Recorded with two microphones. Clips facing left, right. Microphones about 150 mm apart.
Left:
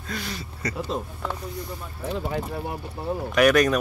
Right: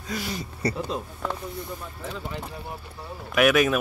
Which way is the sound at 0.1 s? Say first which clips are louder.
Right 2 dB; 10° right (ahead or behind).